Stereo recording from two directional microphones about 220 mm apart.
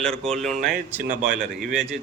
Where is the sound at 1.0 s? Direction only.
40° right (ahead or behind).